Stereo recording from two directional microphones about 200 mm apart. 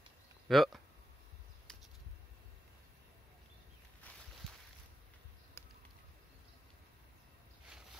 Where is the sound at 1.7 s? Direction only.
5° left (ahead or behind).